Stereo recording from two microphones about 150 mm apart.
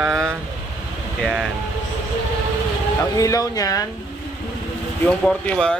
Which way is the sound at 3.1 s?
20° left (ahead or behind).